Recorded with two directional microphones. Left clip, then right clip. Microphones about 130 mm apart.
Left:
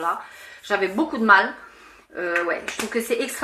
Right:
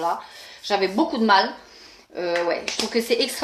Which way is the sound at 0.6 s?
20° right (ahead or behind).